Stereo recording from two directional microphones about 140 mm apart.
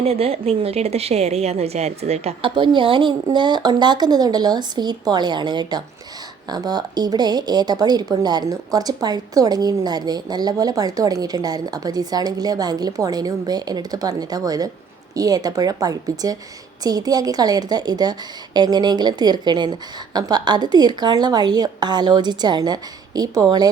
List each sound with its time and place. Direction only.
0.0 s a woman's voice: 45° right (ahead or behind); by 23.6 s 25° right (ahead or behind)